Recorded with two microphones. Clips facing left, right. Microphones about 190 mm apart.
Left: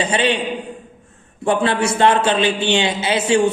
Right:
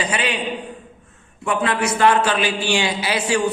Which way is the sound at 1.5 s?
30° left (ahead or behind).